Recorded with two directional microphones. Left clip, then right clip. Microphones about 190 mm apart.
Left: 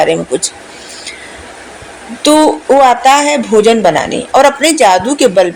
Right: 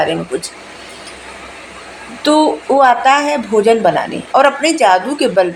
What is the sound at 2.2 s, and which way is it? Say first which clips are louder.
A woman's voice: left 4 dB; 35° left (ahead or behind).